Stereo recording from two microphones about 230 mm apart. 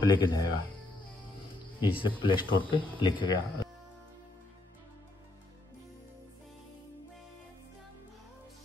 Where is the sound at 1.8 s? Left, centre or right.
Left.